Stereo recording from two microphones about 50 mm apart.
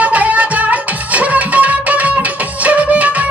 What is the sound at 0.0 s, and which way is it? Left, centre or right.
Music, right.